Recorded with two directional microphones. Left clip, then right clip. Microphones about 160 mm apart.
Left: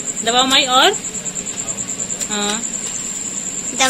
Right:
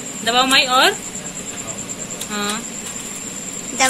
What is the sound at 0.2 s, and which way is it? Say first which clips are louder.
Speech: left 1 dB; 30° left (ahead or behind).